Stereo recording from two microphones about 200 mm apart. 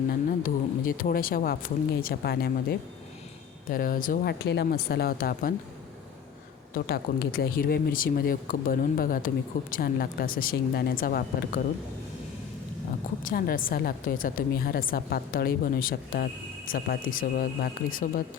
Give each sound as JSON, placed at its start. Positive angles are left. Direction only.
{"t": 0.1, "sound": "speech", "side_deg": 45}
{"t": 4.4, "sound": "speech", "side_deg": 55}
{"t": 6.7, "sound": "speech", "side_deg": 50}
{"t": 13.2, "sound": "speech", "side_deg": 45}